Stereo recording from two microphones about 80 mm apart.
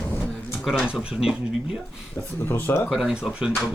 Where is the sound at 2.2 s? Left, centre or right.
Left.